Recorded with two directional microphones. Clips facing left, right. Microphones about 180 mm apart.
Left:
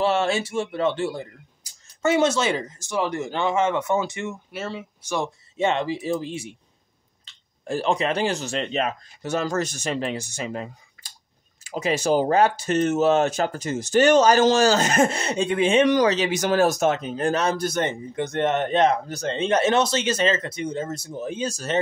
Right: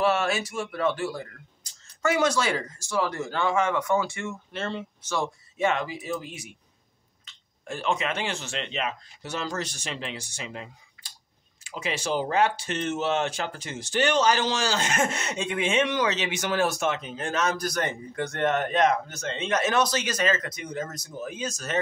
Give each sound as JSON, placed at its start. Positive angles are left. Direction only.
{"t": 0.0, "sound": "speech", "side_deg": 25}
{"t": 4.6, "sound": "speech", "side_deg": 5}
{"t": 5.1, "sound": "speech", "side_deg": 20}
{"t": 7.3, "sound": "a sound", "side_deg": 30}
{"t": 7.6, "sound": "speech", "side_deg": 35}